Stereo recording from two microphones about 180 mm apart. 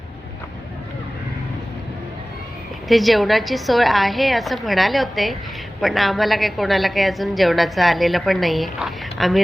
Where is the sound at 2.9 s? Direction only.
Centre (ahead or behind).